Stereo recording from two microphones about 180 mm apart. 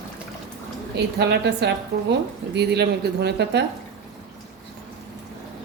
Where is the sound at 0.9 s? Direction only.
70° right (ahead or behind).